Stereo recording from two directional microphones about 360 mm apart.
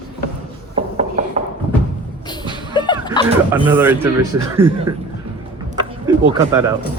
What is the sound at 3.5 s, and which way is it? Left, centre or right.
Speech, centre.